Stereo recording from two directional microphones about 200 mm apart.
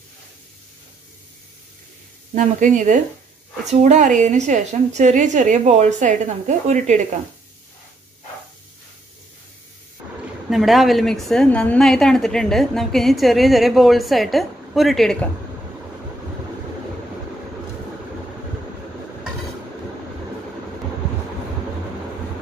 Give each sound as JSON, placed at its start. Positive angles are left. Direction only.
{"t": 2.3, "sound": "a woman's voice", "side_deg": -40}
{"t": 10.5, "sound": "a woman's voice", "side_deg": 0}